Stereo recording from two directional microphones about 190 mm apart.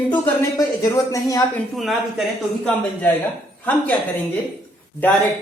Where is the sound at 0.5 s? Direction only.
15° left (ahead or behind).